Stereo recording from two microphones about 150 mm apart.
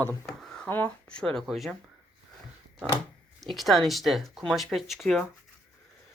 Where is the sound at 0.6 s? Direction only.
10° left (ahead or behind).